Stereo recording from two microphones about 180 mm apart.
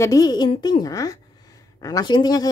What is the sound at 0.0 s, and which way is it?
Speech, 20° left (ahead or behind).